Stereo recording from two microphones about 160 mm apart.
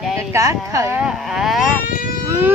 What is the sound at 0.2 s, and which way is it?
Speech, 20° right (ahead or behind).